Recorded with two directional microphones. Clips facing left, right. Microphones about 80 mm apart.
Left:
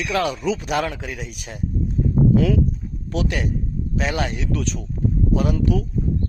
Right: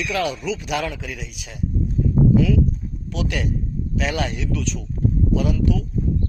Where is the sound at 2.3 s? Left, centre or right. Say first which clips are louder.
Even; left.